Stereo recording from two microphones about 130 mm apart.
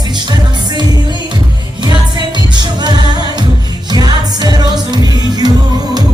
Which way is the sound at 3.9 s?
30° right (ahead or behind).